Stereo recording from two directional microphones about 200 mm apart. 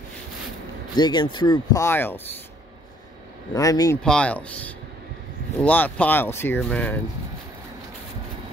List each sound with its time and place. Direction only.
0.9 s speech: 20° left (ahead or behind)
3.5 s speech: 15° left (ahead or behind)
4.0 s speech: 5° left (ahead or behind)